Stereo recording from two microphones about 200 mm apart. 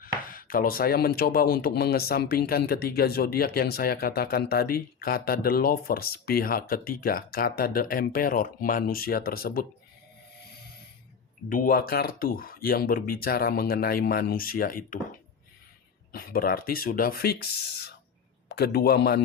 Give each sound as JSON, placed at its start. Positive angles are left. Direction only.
{"t": 0.0, "sound": "speech", "side_deg": 45}
{"t": 11.4, "sound": "speech", "side_deg": 45}
{"t": 16.1, "sound": "speech", "side_deg": 45}